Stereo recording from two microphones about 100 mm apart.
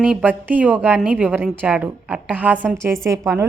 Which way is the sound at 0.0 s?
10° right (ahead or behind).